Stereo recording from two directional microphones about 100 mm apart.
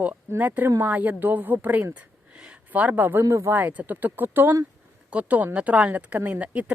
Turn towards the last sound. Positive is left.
turn(degrees=-15)  # may be behind; listen again after turning